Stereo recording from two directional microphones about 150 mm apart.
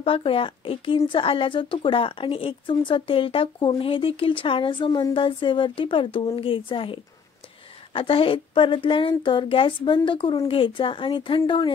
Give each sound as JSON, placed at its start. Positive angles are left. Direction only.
{"t": 0.0, "sound": "speech", "side_deg": 40}